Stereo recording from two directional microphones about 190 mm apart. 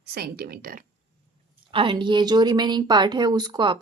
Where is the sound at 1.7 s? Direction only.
25° right (ahead or behind).